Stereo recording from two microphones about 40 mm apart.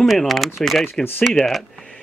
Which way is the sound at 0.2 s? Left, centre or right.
Centre.